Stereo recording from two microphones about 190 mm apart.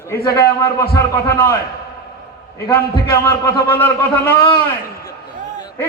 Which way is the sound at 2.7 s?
15° left (ahead or behind).